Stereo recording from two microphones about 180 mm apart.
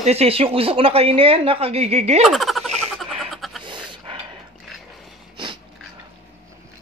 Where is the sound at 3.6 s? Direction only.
25° right (ahead or behind).